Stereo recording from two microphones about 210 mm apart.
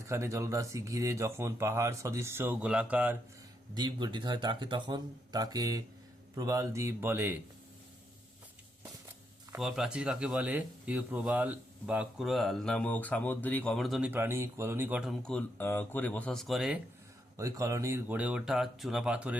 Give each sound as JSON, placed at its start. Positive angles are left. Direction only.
{"t": 0.1, "sound": "speech", "side_deg": -15}
{"t": 3.8, "sound": "speech", "side_deg": -20}
{"t": 9.5, "sound": "speech", "side_deg": 0}
{"t": 17.3, "sound": "speech", "side_deg": -15}